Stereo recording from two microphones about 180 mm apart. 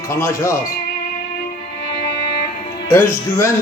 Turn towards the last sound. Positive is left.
turn(degrees=15)  # may be behind; listen again after turning